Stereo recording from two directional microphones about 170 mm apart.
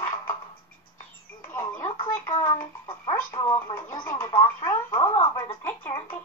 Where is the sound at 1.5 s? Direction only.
20° left (ahead or behind).